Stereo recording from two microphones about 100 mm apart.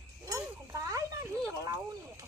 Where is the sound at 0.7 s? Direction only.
35° right (ahead or behind).